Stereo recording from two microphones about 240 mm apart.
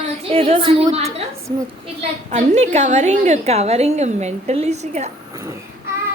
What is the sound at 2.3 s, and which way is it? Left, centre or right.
A woman's voice, right.